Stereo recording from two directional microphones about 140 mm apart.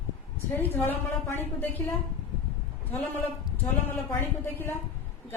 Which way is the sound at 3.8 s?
15° left (ahead or behind).